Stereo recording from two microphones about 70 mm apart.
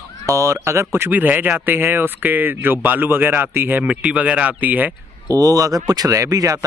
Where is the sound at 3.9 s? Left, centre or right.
Centre.